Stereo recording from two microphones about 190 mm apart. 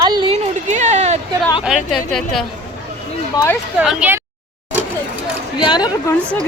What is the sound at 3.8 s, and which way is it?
Speech, 5° right (ahead or behind).